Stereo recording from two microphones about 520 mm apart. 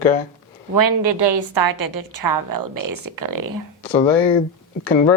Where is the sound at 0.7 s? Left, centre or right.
Right.